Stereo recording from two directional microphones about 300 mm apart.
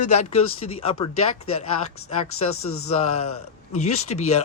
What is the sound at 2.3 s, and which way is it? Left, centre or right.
Speech, left.